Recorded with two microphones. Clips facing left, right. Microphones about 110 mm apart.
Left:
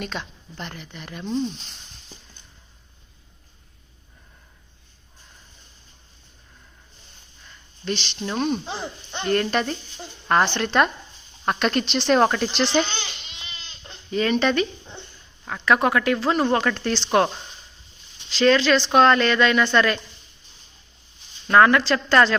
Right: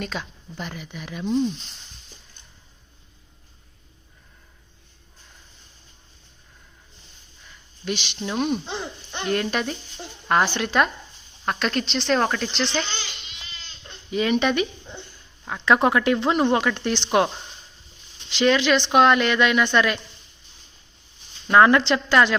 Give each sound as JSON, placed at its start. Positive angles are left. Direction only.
{"t": 0.0, "sound": "speech", "side_deg": 0}
{"t": 7.4, "sound": "speech", "side_deg": -10}
{"t": 14.1, "sound": "speech", "side_deg": -10}
{"t": 18.3, "sound": "a woman's voice", "side_deg": -15}
{"t": 21.6, "sound": "speech", "side_deg": -25}
{"t": 22.1, "sound": "a woman's voice", "side_deg": -15}